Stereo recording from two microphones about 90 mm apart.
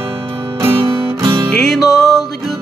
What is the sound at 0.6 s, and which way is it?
Music, 35° right (ahead or behind).